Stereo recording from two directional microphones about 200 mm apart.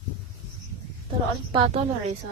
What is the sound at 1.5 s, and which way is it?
Speech, 25° right (ahead or behind).